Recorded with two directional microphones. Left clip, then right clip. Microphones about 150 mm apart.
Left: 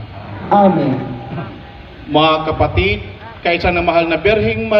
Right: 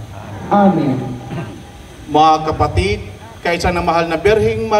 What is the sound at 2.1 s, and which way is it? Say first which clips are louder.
A man's voice: right 1 dB; 65° right (ahead or behind).